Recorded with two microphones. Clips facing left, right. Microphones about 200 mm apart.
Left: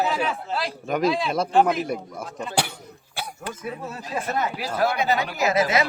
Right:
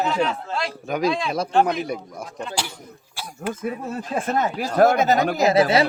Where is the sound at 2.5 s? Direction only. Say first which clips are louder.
Left 3 dB; 60° left (ahead or behind).